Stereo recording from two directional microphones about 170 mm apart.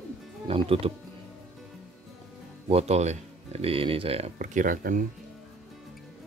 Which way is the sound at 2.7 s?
40° right (ahead or behind).